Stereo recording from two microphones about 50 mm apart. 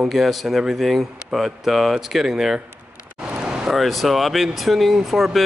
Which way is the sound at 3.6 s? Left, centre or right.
Centre.